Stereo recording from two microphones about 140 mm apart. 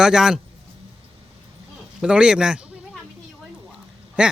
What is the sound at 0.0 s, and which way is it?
Speech, 5° right (ahead or behind).